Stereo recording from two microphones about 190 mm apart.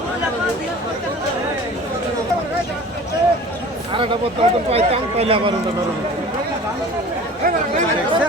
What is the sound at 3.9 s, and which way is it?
Speech, 30° right (ahead or behind).